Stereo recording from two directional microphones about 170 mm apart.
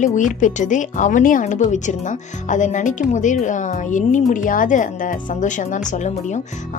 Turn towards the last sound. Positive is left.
turn(degrees=45)  # may be behind; listen again after turning